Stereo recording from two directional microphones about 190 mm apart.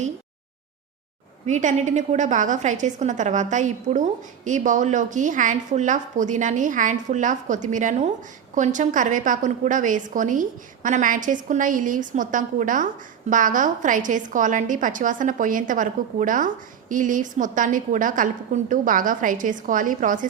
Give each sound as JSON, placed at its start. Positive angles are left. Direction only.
{"t": 1.5, "sound": "a woman's voice", "side_deg": -40}